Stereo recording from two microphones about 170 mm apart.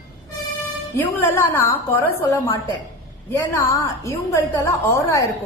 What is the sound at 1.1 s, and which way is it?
A woman's voice, 15° left (ahead or behind).